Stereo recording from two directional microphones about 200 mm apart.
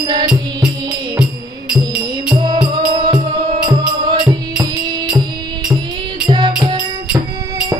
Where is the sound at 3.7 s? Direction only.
20° right (ahead or behind).